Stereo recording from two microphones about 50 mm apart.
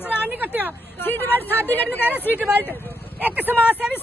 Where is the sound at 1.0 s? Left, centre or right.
Left.